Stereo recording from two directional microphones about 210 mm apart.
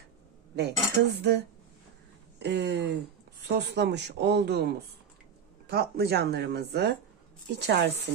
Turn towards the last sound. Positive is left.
turn(degrees=-55)  # may be behind; listen again after turning